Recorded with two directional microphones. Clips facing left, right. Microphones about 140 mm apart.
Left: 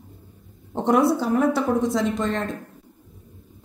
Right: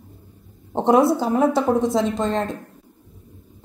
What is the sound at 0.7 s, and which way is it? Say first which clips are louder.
A woman's voice: right 3 dB; 25° right (ahead or behind).